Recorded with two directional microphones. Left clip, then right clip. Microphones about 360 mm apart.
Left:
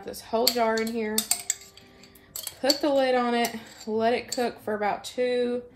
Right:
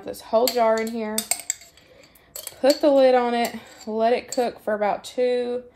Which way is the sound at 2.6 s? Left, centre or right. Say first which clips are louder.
Right 7 dB; right.